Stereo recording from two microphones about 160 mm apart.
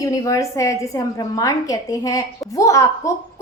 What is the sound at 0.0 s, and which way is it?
A woman's voice, 20° left (ahead or behind).